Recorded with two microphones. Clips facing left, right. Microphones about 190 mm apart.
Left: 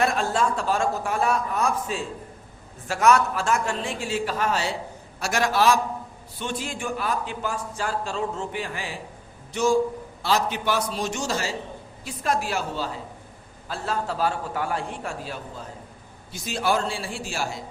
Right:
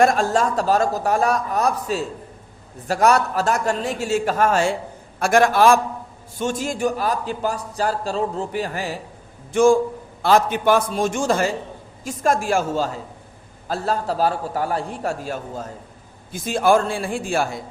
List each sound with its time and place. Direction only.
0.0 s a man's voice: 45° right (ahead or behind)